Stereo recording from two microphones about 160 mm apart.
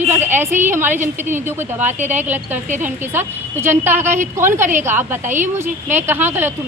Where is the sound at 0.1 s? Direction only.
15° right (ahead or behind).